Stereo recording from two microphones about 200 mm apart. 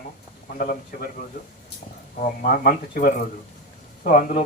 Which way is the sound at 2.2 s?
45° left (ahead or behind).